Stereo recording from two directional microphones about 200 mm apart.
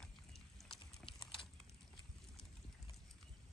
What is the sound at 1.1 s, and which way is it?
Clip-clop, 25° left (ahead or behind).